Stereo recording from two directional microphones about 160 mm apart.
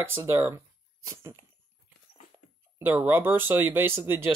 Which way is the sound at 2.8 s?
15° right (ahead or behind).